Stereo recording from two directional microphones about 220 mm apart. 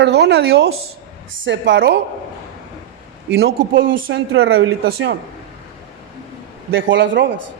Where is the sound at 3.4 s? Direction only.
60° right (ahead or behind).